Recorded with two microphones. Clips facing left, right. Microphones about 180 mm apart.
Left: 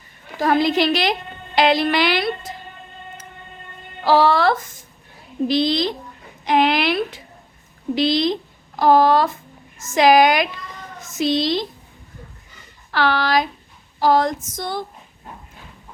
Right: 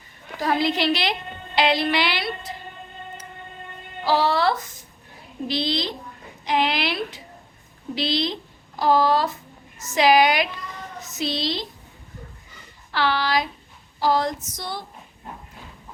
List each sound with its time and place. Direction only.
0.3 s a woman's voice: 50° left (ahead or behind)
4.0 s a woman's voice: 50° left (ahead or behind)
12.9 s a woman's voice: 50° left (ahead or behind)